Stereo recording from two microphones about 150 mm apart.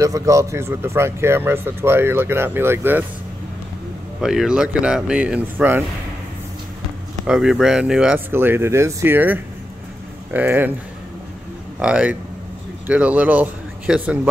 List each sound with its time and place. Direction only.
0.0 s speech: 20° right (ahead or behind)
4.2 s speech: 5° right (ahead or behind)
7.2 s speech: centre (ahead or behind)
11.8 s speech: 10° right (ahead or behind)